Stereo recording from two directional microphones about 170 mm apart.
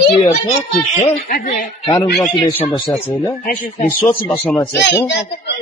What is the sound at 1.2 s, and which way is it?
Speech, 55° left (ahead or behind).